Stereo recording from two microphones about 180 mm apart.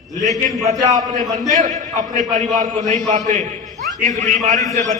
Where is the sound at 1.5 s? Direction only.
45° right (ahead or behind).